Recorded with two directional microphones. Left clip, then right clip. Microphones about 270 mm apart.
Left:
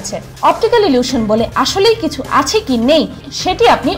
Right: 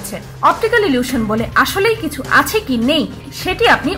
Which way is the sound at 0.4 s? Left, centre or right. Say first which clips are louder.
Left 2 dB; centre.